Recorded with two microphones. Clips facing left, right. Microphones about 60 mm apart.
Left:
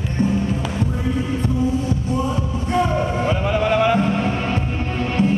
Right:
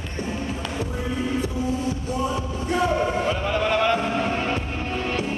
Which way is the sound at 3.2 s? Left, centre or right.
Centre.